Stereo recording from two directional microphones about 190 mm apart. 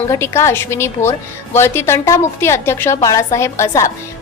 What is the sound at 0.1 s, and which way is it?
A woman's voice, 15° left (ahead or behind).